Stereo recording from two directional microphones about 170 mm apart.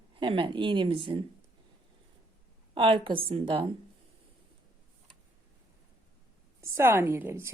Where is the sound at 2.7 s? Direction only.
30° right (ahead or behind).